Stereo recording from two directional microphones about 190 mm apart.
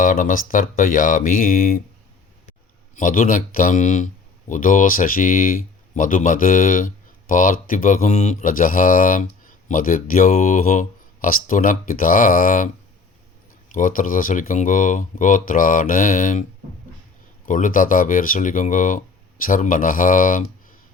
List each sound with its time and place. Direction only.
0.0 s speech: 45° left (ahead or behind)
13.7 s speech: 45° left (ahead or behind)